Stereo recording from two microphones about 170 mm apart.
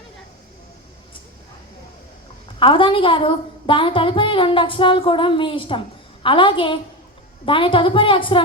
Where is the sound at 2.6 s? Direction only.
30° left (ahead or behind).